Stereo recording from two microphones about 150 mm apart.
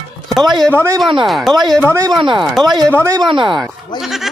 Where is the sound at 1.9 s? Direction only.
25° right (ahead or behind).